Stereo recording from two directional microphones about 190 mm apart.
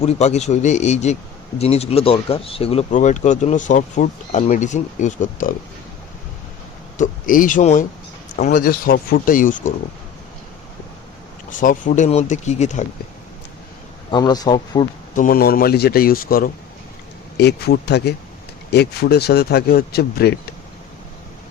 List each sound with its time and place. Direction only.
0.0 s speech: 35° left (ahead or behind)
7.0 s speech: 45° left (ahead or behind)
11.5 s speech: 45° left (ahead or behind)
14.1 s speech: 20° left (ahead or behind)
15.1 s speech: 45° left (ahead or behind)
17.3 s speech: 60° left (ahead or behind)